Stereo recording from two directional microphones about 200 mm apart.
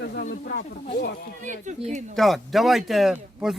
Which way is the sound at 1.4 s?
40° right (ahead or behind).